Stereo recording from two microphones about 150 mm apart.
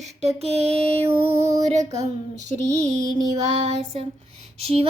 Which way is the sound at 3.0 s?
25° right (ahead or behind).